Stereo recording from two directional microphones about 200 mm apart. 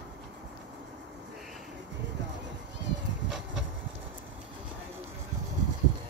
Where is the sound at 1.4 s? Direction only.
Centre (ahead or behind).